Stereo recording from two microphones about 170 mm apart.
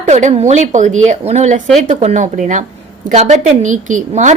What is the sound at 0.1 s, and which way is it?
A woman's voice, 40° right (ahead or behind).